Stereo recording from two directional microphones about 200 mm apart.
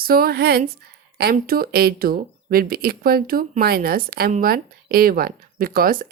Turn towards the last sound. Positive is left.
turn(degrees=-45)  # may be behind; listen again after turning